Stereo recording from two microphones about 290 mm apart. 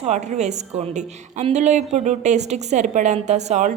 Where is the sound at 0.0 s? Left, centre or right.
Right.